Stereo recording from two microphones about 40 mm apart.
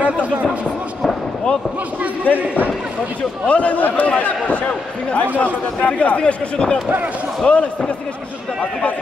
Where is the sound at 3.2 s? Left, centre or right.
Left.